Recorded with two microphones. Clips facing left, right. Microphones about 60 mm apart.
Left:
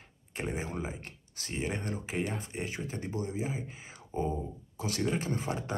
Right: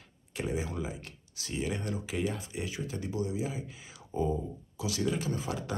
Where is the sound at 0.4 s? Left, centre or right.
Left.